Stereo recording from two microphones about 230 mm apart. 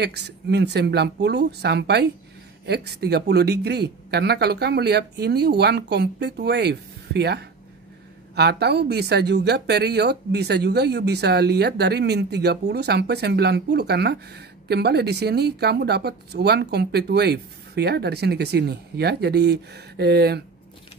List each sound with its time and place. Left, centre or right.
0.0 s speech: right